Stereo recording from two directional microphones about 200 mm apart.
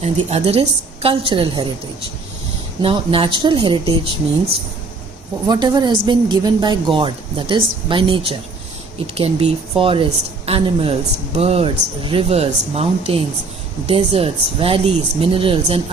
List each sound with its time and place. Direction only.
0.0 s a woman's voice: 30° right (ahead or behind)
5.5 s a woman's voice: 20° right (ahead or behind)